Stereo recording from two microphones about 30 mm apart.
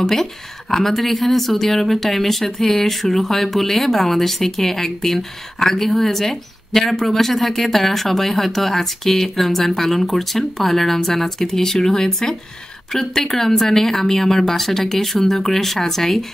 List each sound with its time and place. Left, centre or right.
0.0 s speech: centre